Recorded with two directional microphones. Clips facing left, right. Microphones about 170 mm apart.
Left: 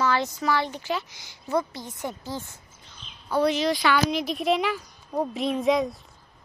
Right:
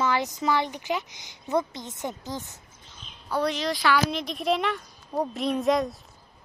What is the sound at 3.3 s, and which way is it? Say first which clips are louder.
Speech: left 4 dB; 5° left (ahead or behind).